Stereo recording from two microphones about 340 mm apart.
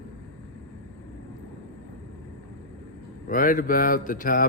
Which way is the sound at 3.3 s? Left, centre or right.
Left.